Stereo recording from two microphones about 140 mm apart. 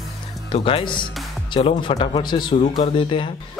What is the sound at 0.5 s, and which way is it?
A man's voice, 40° left (ahead or behind).